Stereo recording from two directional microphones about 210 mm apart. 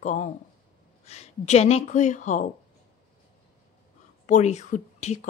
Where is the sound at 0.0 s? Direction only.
35° left (ahead or behind).